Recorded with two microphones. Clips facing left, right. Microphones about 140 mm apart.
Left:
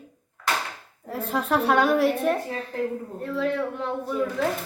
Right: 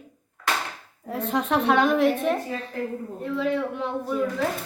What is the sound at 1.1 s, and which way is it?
A woman's voice, 5° left (ahead or behind).